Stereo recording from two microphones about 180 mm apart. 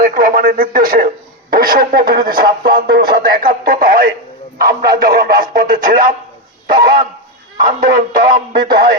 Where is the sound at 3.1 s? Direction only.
55° right (ahead or behind).